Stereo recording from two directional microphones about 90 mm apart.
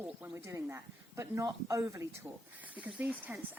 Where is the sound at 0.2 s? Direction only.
30° right (ahead or behind).